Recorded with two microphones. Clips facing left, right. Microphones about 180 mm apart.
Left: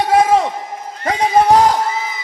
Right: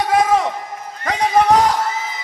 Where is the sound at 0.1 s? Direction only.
30° left (ahead or behind).